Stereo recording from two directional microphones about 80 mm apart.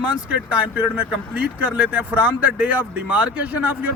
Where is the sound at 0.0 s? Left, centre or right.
Centre.